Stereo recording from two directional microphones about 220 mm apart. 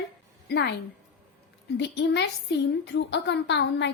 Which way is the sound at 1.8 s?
50° left (ahead or behind).